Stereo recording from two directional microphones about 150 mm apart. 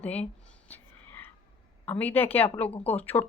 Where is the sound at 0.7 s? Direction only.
15° left (ahead or behind).